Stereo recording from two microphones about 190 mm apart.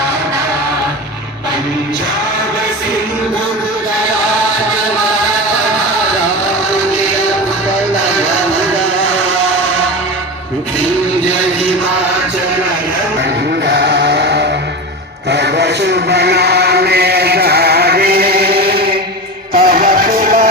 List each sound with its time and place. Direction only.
13.2 s music: 60° right (ahead or behind)
15.3 s chant: 65° right (ahead or behind)
19.5 s music: 50° right (ahead or behind)